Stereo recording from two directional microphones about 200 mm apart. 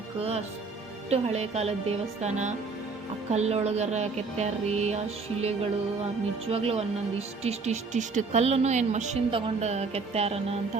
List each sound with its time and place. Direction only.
0.2 s a woman's voice: 30° right (ahead or behind)